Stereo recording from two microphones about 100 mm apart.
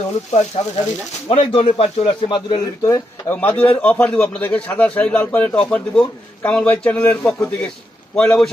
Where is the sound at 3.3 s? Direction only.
20° left (ahead or behind).